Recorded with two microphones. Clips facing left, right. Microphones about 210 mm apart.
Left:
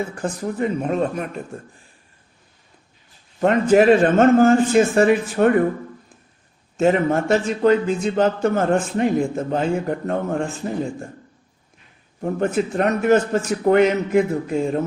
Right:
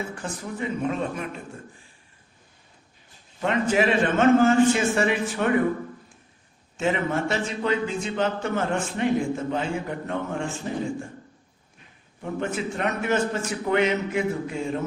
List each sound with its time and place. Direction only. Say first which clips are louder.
0.2 s a man's voice: left 8 dB; 45° left (ahead or behind)
3.4 s a man's voice: left 8 dB; 45° left (ahead or behind)
6.7 s a man's voice: left 7 dB; 45° left (ahead or behind)
12.2 s a man's voice: left 7 dB; 40° left (ahead or behind)